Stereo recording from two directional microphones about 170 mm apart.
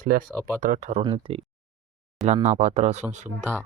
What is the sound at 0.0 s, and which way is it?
Speech, 55° right (ahead or behind).